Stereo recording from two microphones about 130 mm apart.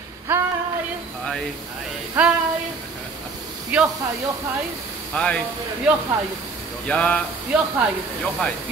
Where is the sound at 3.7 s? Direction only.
10° right (ahead or behind).